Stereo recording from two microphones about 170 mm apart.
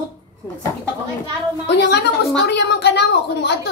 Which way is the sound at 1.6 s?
80° left.